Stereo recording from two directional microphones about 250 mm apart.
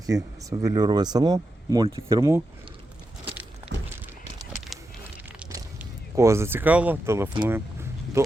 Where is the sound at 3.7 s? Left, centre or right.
Right.